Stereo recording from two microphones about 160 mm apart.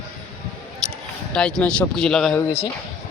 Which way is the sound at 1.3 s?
5° left (ahead or behind).